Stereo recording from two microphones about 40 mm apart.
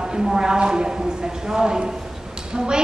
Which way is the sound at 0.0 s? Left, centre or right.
Centre.